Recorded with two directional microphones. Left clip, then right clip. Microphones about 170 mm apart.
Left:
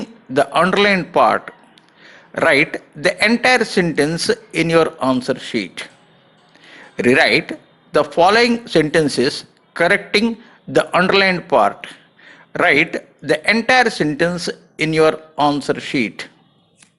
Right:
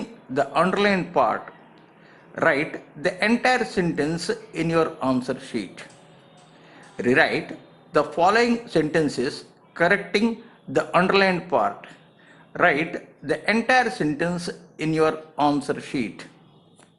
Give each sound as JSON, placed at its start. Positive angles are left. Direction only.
{"t": 0.3, "sound": "a man's voice", "side_deg": 25}
{"t": 6.9, "sound": "speech", "side_deg": 25}